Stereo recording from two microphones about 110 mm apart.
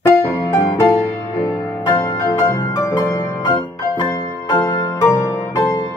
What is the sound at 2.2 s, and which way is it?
Music, 25° left (ahead or behind).